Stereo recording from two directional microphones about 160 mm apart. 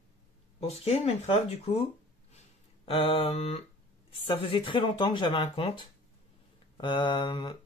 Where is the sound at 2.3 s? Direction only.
35° left (ahead or behind).